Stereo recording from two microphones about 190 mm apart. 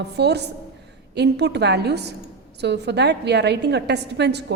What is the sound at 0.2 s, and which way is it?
A woman's voice, 60° right (ahead or behind).